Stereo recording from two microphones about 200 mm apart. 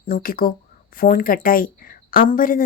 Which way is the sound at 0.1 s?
45° left (ahead or behind).